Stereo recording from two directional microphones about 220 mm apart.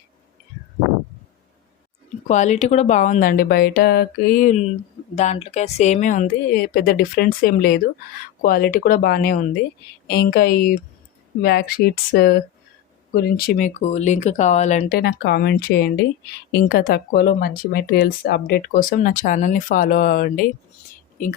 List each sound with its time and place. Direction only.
2.2 s speech: 35° left (ahead or behind)